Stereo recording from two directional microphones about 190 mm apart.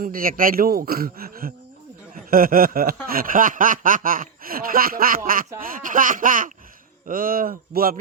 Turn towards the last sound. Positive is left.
turn(degrees=-50)  # may be behind; listen again after turning